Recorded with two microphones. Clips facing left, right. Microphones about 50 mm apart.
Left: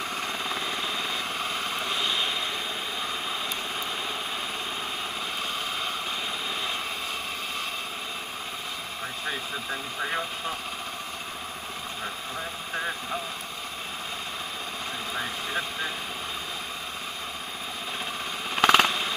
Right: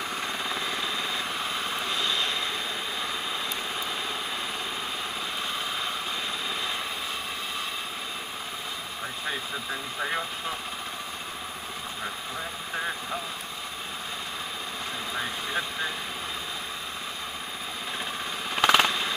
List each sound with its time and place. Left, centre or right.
0.1 s vehicle: right
0.8 s vehicle: left
9.7 s speech: centre
12.7 s vehicle: centre
18.6 s a sound: centre